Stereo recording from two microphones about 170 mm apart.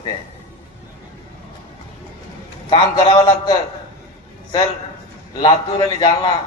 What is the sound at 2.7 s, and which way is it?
Speech, 25° left (ahead or behind).